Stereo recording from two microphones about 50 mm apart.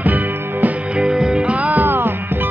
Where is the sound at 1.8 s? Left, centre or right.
Right.